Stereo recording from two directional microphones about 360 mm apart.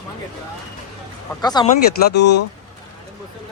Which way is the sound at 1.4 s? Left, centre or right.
Centre.